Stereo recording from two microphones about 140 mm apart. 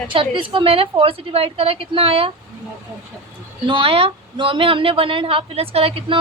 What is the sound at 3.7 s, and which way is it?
A woman's voice, 40° right (ahead or behind).